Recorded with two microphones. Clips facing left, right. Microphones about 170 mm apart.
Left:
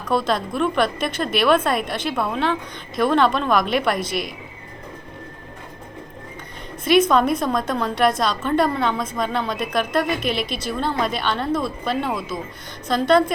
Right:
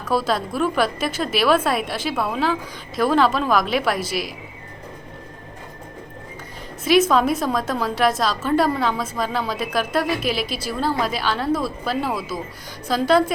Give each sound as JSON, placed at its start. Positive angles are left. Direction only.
{"t": 0.0, "sound": "a woman's voice", "side_deg": -5}
{"t": 6.8, "sound": "a woman's voice", "side_deg": -5}